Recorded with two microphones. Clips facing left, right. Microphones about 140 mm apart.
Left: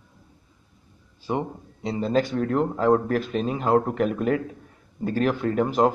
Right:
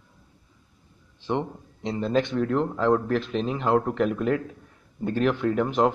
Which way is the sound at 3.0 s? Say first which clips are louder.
Left 1 dB; 45° left (ahead or behind).